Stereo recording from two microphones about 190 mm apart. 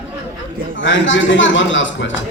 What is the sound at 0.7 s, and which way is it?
A woman's voice, 75° left (ahead or behind).